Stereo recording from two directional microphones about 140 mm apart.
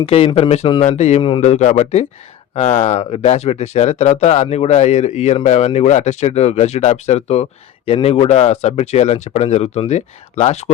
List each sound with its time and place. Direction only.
0.0 s speech: 45° left (ahead or behind)